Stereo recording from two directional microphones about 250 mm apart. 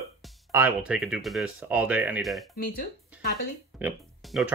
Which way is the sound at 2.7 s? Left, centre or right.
Left.